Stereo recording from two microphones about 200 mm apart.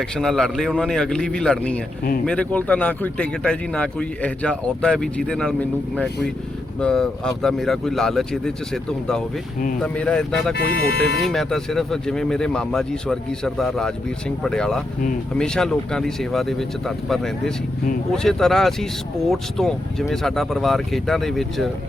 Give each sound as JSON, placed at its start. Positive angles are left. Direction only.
{"t": 0.0, "sound": "speech", "side_deg": 0}
{"t": 10.5, "sound": "speech", "side_deg": 55}
{"t": 11.3, "sound": "speech", "side_deg": 0}